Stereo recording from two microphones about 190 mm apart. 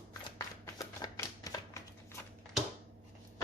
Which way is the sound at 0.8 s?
20° left (ahead or behind).